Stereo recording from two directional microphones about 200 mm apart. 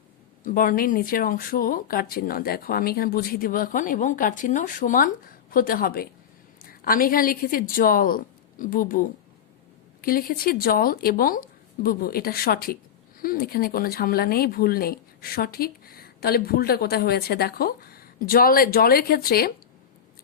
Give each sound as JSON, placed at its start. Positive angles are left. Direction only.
{"t": 0.4, "sound": "speech", "side_deg": 45}